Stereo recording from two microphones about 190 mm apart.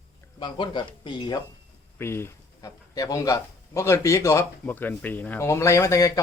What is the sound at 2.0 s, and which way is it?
Speech, 15° left (ahead or behind).